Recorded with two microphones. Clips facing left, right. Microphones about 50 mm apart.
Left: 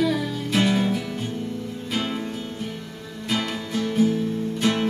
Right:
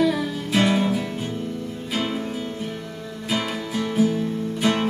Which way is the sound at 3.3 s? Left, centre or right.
Centre.